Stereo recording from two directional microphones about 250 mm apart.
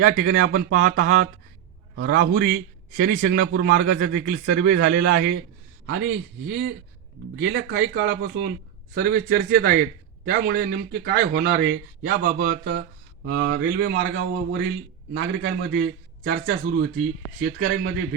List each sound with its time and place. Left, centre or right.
0.2 s a man's voice: right
3.4 s a man's voice: right
4.1 s a man's voice: right